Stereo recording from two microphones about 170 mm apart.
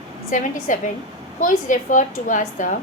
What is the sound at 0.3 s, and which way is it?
A woman's voice, 50° left (ahead or behind).